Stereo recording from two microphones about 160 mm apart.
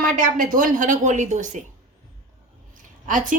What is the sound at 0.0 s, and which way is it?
A woman's voice, 60° right (ahead or behind).